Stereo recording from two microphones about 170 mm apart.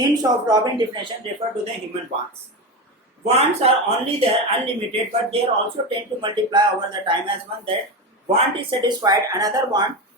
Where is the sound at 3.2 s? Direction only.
35° right (ahead or behind).